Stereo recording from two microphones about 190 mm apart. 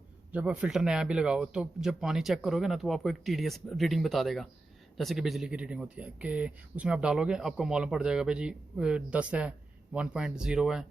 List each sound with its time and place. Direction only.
0.3 s speech: 5° right (ahead or behind)